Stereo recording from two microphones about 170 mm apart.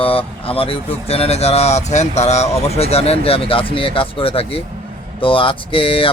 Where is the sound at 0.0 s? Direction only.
35° left (ahead or behind).